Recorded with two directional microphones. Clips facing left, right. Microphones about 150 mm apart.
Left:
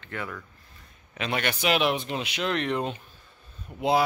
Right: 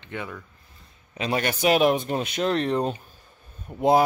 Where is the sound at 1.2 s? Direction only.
35° right (ahead or behind).